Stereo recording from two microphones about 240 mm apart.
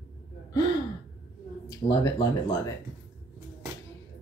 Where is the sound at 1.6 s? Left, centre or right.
Centre.